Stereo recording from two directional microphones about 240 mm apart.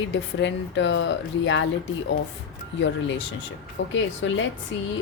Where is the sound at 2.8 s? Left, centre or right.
Left.